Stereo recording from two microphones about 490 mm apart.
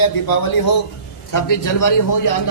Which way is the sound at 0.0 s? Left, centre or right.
Left.